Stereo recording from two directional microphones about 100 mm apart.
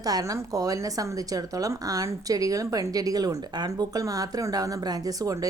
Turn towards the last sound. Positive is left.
turn(degrees=-35)  # may be behind; listen again after turning